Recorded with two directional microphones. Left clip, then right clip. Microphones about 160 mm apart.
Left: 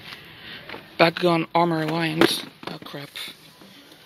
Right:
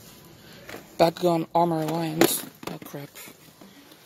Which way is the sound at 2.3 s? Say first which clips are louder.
Left 5 dB; 30° right (ahead or behind).